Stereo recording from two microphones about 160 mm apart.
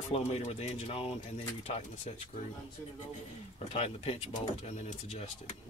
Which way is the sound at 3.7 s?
40° left (ahead or behind).